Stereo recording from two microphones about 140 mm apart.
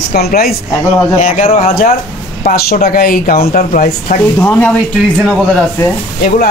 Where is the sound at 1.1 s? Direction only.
60° left (ahead or behind).